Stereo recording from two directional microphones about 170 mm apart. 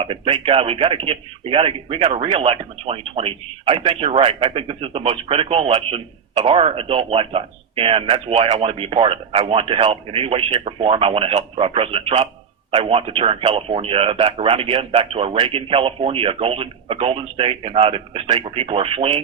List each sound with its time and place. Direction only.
0.0 s speech: 35° right (ahead or behind)